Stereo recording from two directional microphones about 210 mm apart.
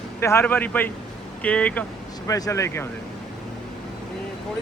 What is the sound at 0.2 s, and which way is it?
A man's voice, 10° left (ahead or behind).